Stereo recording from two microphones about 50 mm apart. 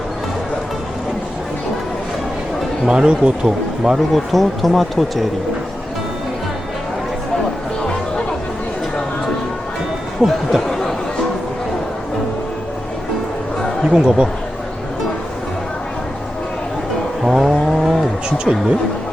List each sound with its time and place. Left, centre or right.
2.8 s speech: centre
3.9 s speech: centre
10.2 s speech: centre
10.7 s chatter: centre
13.9 s speech: centre
17.2 s a sound: centre